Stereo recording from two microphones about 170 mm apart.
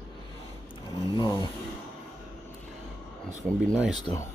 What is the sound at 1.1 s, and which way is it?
Speech, 20° left (ahead or behind).